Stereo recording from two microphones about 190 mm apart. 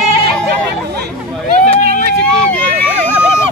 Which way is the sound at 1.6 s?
55° right (ahead or behind).